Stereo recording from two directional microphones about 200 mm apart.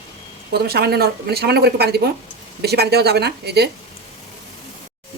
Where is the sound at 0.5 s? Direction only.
55° right (ahead or behind).